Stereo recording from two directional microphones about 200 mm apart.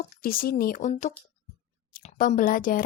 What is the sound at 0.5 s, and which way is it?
A woman's voice, 45° left (ahead or behind).